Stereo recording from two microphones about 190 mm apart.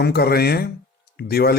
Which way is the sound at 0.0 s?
55° left (ahead or behind).